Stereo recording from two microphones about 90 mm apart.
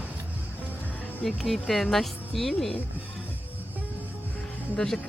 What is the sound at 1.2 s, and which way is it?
Speech, centre (ahead or behind).